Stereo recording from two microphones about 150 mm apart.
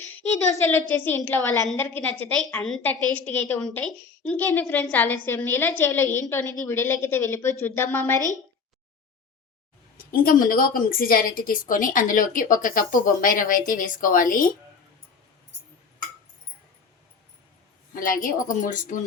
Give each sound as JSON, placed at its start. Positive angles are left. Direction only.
{"t": 0.5, "sound": "a woman's voice", "side_deg": 20}
{"t": 10.0, "sound": "a woman's voice", "side_deg": 75}
{"t": 18.0, "sound": "a woman's voice", "side_deg": 70}